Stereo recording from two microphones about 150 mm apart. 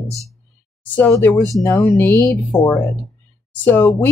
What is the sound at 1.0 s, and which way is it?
A woman's voice, 15° left (ahead or behind).